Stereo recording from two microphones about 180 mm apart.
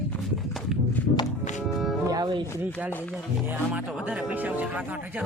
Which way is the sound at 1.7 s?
Centre (ahead or behind).